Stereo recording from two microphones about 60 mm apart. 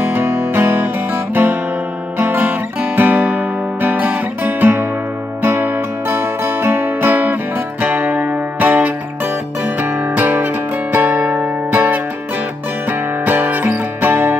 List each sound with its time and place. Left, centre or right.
0.3 s music: right
1.3 s guitar: right
5.4 s music: right
13.2 s music: right